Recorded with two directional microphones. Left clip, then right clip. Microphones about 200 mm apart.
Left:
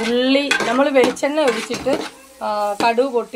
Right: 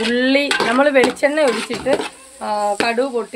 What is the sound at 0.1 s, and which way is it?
Dishes, 20° right (ahead or behind).